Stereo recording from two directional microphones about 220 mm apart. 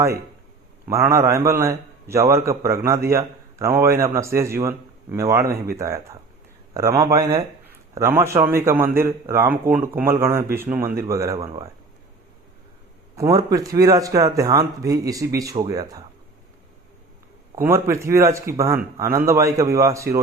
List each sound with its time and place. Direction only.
0.9 s a man's voice: 15° right (ahead or behind)
11.4 s speech: 25° right (ahead or behind)
13.1 s a man's voice: 15° right (ahead or behind)
17.5 s a man's voice: 10° right (ahead or behind)